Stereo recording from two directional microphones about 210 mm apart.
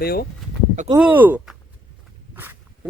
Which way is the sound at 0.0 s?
45° left (ahead or behind).